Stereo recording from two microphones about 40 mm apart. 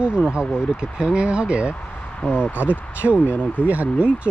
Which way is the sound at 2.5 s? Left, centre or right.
Right.